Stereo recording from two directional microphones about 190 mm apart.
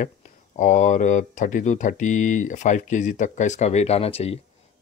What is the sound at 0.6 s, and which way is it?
Speech, 40° left (ahead or behind).